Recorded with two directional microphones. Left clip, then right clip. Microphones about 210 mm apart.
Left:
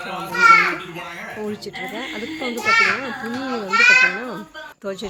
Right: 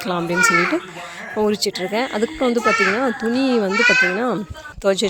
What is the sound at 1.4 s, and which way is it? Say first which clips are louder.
Speech: right 11 dB; 50° right (ahead or behind).